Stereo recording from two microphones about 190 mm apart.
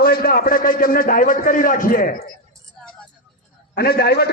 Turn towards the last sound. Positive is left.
turn(degrees=55)  # may be behind; listen again after turning